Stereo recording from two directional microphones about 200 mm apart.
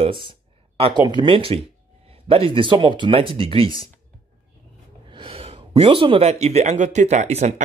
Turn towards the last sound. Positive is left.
turn(degrees=-35)  # may be behind; listen again after turning